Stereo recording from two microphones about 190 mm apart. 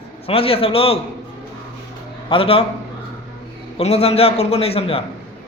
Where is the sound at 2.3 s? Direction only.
30° left (ahead or behind).